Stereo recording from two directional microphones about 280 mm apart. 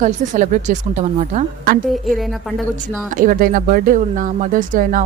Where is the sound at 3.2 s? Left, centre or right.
Right.